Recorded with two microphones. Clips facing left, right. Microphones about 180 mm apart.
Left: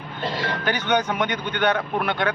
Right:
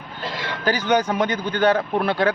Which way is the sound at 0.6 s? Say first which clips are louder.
Right 4 dB; 35° right (ahead or behind).